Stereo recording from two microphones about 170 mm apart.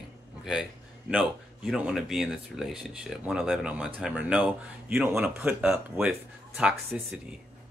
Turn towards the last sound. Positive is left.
turn(degrees=-10)  # may be behind; listen again after turning